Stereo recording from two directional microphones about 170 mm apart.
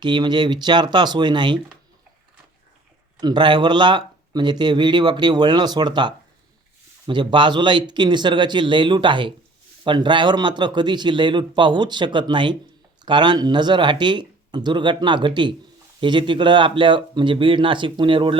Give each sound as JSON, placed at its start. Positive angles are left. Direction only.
{"t": 0.0, "sound": "speech", "side_deg": -25}
{"t": 3.2, "sound": "speech", "side_deg": -25}